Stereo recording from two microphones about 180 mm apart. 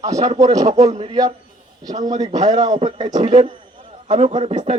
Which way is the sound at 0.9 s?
35° right (ahead or behind).